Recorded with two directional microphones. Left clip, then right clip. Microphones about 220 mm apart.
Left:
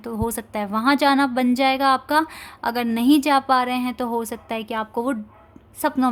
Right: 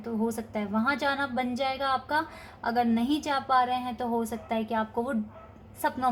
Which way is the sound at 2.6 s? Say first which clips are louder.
Left 5 dB; 45° left (ahead or behind).